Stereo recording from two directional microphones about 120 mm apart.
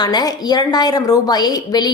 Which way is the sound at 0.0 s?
35° left (ahead or behind).